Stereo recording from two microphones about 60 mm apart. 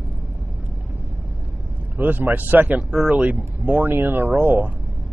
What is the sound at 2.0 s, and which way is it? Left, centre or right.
Speech, right.